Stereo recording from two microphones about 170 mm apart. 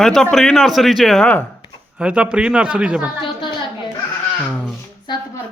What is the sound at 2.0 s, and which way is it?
A child's voice, 5° right (ahead or behind).